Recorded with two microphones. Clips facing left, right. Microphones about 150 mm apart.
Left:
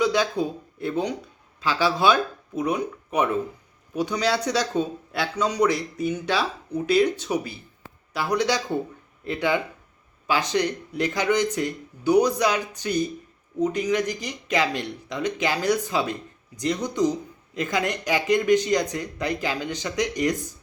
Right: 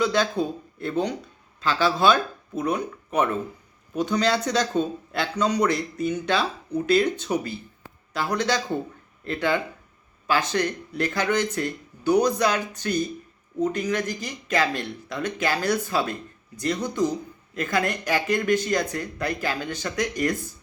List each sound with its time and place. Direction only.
0.0 s speech: 10° left (ahead or behind)